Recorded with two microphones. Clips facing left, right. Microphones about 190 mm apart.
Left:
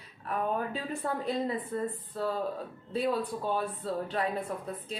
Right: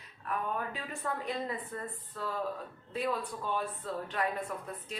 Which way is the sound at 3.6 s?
30° left (ahead or behind).